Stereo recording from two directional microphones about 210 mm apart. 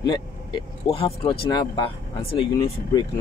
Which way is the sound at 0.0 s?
20° left (ahead or behind).